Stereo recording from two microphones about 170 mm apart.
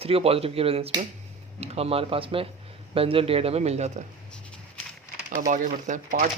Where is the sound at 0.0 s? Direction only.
35° right (ahead or behind).